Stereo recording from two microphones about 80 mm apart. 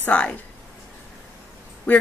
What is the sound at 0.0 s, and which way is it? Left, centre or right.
Speech, centre.